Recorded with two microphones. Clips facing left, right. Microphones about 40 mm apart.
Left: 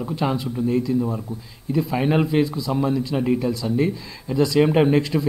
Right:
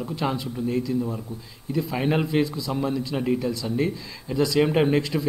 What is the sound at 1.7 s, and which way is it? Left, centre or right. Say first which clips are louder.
Speech: left 4 dB; centre.